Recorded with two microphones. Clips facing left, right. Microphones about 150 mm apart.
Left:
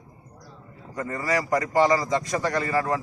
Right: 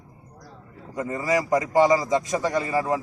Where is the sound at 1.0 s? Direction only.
20° right (ahead or behind).